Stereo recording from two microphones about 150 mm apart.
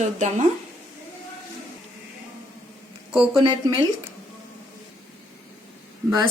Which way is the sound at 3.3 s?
25° right (ahead or behind).